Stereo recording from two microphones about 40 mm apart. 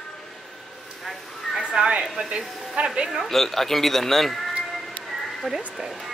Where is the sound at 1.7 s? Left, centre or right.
Right.